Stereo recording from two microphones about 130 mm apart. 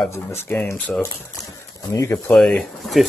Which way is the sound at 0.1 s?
20° left (ahead or behind).